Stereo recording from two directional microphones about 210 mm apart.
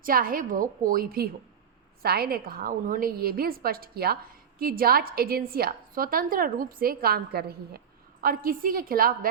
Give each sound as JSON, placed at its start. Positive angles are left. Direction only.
{"t": 0.0, "sound": "a woman's voice", "side_deg": -45}